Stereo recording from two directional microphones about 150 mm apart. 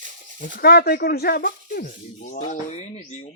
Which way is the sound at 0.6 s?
90° left.